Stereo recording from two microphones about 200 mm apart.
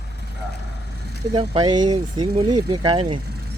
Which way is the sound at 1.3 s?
25° right (ahead or behind).